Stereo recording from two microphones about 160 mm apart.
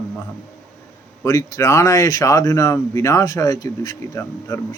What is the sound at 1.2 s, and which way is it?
Speech, 20° left (ahead or behind).